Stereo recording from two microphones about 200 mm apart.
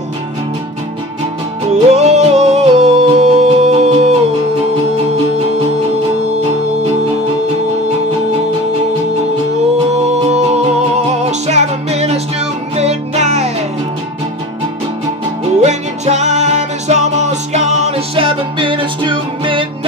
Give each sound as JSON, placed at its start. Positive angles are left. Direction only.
{"t": 1.7, "sound": "music", "side_deg": -30}
{"t": 9.9, "sound": "music", "side_deg": -35}
{"t": 15.6, "sound": "music", "side_deg": -35}